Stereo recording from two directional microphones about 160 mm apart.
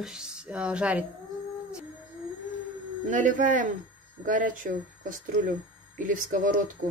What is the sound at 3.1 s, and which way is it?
Speech, 50° right (ahead or behind).